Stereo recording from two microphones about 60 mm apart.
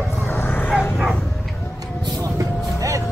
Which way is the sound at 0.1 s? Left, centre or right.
Left.